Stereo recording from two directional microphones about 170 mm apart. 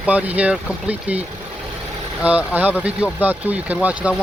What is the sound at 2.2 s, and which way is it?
Speech, 10° right (ahead or behind).